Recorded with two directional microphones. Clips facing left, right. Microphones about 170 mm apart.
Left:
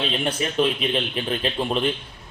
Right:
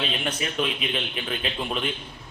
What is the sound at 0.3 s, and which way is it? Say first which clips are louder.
Speech: left 7 dB; 35° left (ahead or behind).